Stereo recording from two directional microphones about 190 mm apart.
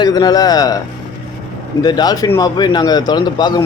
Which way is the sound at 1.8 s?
20° left (ahead or behind).